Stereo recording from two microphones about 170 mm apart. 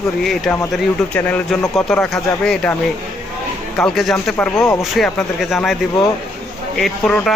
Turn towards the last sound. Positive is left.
turn(degrees=5)  # may be behind; listen again after turning